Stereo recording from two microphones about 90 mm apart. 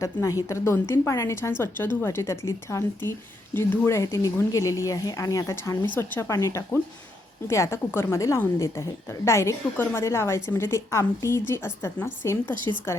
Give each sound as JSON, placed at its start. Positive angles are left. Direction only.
{"t": 0.0, "sound": "speech", "side_deg": 35}
{"t": 1.4, "sound": "speech", "side_deg": 25}
{"t": 5.8, "sound": "a woman's voice", "side_deg": 25}